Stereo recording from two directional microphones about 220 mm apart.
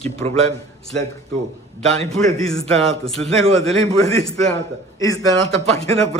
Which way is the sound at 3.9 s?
15° left (ahead or behind).